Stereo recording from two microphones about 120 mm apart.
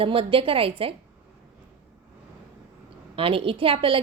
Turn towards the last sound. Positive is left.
turn(degrees=-50)  # may be behind; listen again after turning